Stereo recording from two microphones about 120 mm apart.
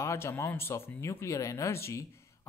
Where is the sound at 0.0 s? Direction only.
20° left (ahead or behind).